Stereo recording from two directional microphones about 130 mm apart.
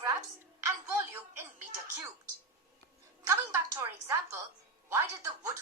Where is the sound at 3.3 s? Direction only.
20° right (ahead or behind).